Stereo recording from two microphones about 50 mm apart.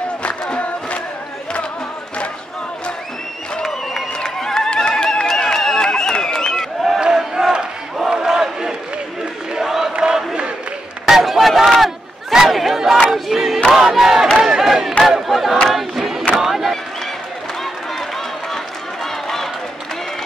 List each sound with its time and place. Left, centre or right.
0.2 s chant: left
4.2 s a sound: centre
7.0 s battle cry: centre
9.6 s chant: centre
9.9 s crowd: centre
11.1 s crowd: centre
13.1 s battle cry: centre
13.7 s crowd: centre
14.4 s battle cry: centre
15.7 s crowd: centre
19.2 s a sound: centre